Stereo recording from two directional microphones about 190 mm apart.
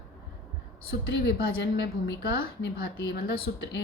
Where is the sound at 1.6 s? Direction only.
65° left (ahead or behind).